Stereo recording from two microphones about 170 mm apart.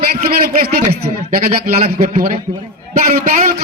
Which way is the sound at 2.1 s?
50° right (ahead or behind).